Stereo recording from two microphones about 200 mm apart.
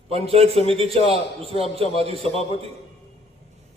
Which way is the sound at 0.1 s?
30° right (ahead or behind).